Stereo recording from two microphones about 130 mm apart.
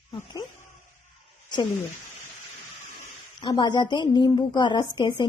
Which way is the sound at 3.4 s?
35° left (ahead or behind).